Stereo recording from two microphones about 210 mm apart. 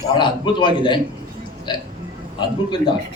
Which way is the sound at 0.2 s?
20° left (ahead or behind).